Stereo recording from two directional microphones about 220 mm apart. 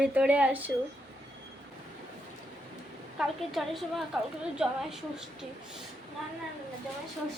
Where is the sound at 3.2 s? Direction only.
Centre (ahead or behind).